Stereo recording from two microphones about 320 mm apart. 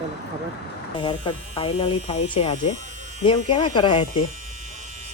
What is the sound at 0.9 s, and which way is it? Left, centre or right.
Speech, centre.